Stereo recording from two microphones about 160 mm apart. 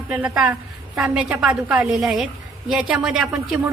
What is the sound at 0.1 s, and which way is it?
A woman's voice, 5° right (ahead or behind).